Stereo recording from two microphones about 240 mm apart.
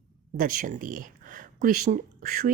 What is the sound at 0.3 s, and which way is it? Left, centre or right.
Speech, right.